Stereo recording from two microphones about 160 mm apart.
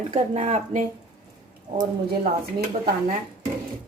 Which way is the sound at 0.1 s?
45° right (ahead or behind).